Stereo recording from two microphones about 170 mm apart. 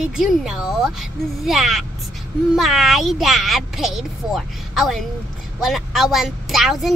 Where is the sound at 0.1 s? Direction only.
5° right (ahead or behind).